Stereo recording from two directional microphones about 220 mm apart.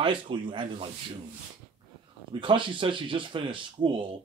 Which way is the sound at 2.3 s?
20° right (ahead or behind).